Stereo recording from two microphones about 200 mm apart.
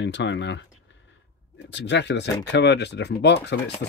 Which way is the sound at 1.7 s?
60° left (ahead or behind).